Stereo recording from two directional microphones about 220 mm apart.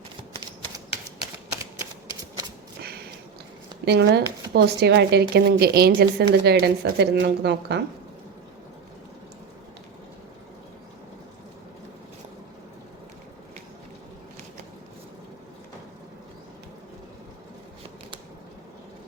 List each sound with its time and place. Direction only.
3.8 s a woman's voice: 50° right (ahead or behind)